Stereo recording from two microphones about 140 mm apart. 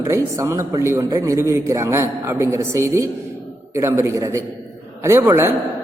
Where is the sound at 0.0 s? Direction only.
20° right (ahead or behind).